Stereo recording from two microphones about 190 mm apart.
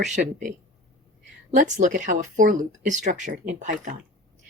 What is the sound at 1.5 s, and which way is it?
Speech, 40° right (ahead or behind).